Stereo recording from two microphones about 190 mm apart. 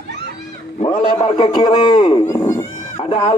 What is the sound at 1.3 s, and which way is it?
Speech, 25° left (ahead or behind).